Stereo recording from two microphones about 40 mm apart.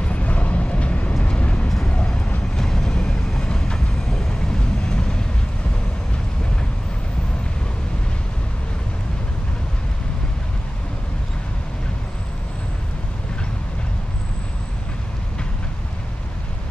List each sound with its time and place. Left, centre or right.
0.0 s vehicle: left
2.5 s vehicle: centre